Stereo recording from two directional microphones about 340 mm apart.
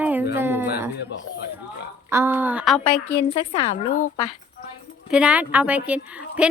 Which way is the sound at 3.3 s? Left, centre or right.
Centre.